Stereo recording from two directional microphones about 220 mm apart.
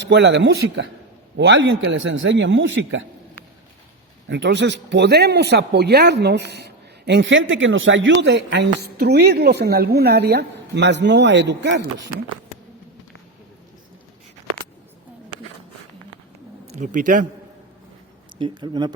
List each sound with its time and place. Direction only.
0.1 s speech: 50° right (ahead or behind)
4.3 s speech: 55° right (ahead or behind)
16.6 s speech: 30° right (ahead or behind)
18.3 s speech: 20° right (ahead or behind)